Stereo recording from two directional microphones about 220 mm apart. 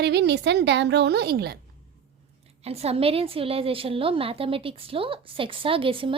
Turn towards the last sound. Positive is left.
turn(degrees=-25)  # may be behind; listen again after turning